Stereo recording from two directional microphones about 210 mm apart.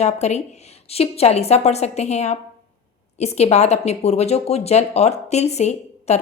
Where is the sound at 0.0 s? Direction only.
30° left (ahead or behind).